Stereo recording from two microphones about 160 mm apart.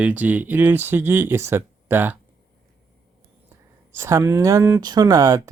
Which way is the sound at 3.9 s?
15° right (ahead or behind).